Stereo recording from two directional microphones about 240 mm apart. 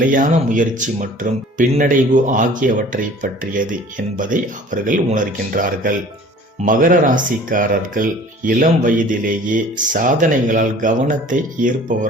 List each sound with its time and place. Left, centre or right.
0.0 s speech: right